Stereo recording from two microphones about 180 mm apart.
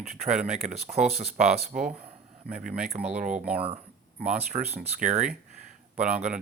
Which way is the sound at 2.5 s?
60° right (ahead or behind).